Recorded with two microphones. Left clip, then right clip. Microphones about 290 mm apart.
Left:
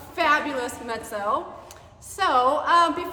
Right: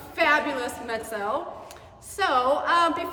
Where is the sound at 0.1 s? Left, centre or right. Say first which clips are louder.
Even; centre.